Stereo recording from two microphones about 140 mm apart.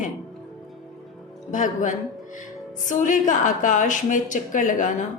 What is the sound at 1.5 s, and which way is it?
A woman's voice, 65° left (ahead or behind).